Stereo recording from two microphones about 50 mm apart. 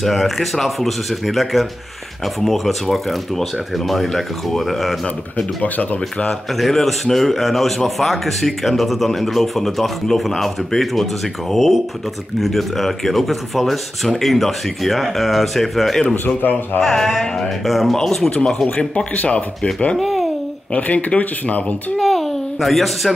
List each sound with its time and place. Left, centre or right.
0.0 s speech: centre
5.6 s speech: left
6.5 s speech: centre
16.0 s speech: centre
16.3 s speech: left
16.8 s speech: centre
20.0 s babbling: centre
20.7 s speech: left
21.9 s a sound: centre